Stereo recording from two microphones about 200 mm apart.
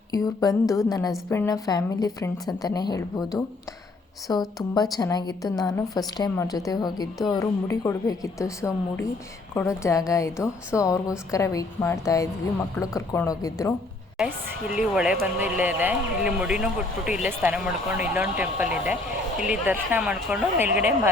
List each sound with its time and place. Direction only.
0.1 s a woman's voice: 20° left (ahead or behind)
14.8 s speech: 5° right (ahead or behind)